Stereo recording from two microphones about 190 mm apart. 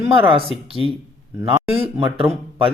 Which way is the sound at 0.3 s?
Centre (ahead or behind).